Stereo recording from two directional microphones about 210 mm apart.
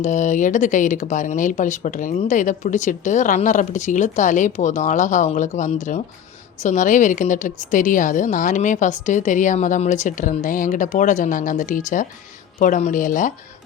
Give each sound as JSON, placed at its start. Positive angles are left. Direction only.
{"t": 0.0, "sound": "speech", "side_deg": 35}